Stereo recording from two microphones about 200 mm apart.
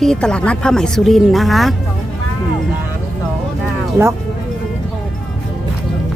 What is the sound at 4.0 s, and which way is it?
Speech, 10° right (ahead or behind).